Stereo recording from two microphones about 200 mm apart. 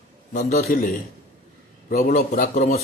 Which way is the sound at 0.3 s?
45° left (ahead or behind).